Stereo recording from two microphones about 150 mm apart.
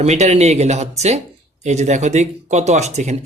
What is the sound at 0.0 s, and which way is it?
Speech, 50° right (ahead or behind).